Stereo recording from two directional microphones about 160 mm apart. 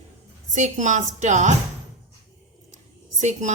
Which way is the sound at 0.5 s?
50° right (ahead or behind).